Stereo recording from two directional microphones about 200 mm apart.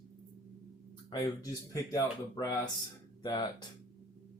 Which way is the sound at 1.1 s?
15° left (ahead or behind).